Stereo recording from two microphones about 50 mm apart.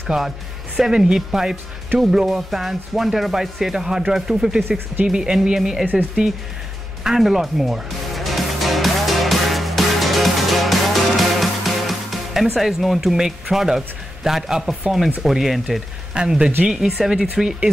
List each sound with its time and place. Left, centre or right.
0.1 s speech: centre
4.6 s speech: right
5.0 s speech: centre
7.0 s music: centre
12.5 s speech: centre
16.2 s speech: centre